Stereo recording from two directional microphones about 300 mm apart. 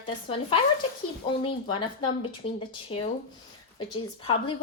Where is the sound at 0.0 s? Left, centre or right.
Centre.